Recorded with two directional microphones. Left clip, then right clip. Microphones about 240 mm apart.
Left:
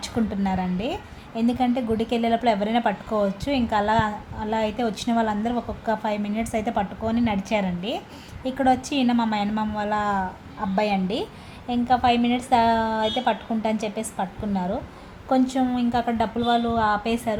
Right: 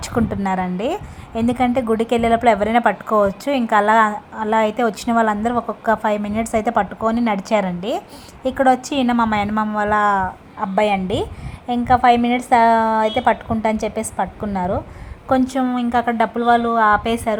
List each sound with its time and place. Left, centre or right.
0.0 s a woman's voice: right